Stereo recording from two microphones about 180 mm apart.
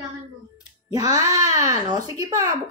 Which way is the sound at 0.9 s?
20° right (ahead or behind).